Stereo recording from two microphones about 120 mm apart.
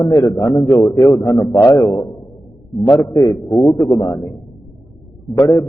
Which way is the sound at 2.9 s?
25° left (ahead or behind).